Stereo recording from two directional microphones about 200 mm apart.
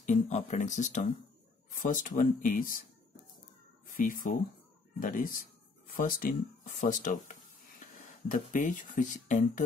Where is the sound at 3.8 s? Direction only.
40° left (ahead or behind).